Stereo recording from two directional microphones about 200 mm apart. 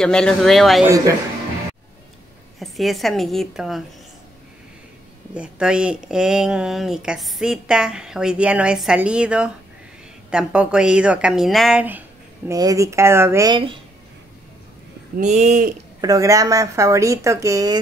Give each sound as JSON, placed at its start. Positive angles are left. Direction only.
{"t": 0.0, "sound": "speech", "side_deg": 5}
{"t": 0.8, "sound": "speech", "side_deg": -15}
{"t": 2.6, "sound": "speech", "side_deg": 0}
{"t": 5.3, "sound": "speech", "side_deg": -5}
{"t": 12.4, "sound": "speech", "side_deg": -15}
{"t": 15.1, "sound": "speech", "side_deg": -35}
{"t": 16.0, "sound": "speech", "side_deg": -15}